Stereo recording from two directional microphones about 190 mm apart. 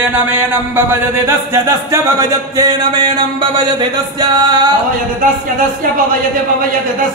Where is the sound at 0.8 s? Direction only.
15° right (ahead or behind).